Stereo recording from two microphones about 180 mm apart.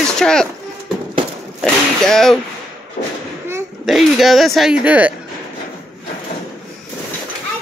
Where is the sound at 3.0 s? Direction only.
45° left (ahead or behind).